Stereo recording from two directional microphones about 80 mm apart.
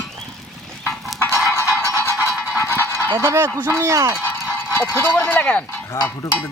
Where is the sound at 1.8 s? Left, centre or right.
Left.